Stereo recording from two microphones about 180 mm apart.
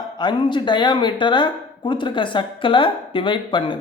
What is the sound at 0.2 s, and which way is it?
Speech, 25° left (ahead or behind).